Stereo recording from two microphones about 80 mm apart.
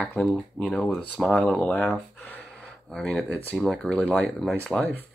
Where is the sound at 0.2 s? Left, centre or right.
Centre.